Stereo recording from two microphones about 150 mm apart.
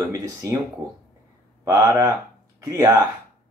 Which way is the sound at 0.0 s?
20° right (ahead or behind).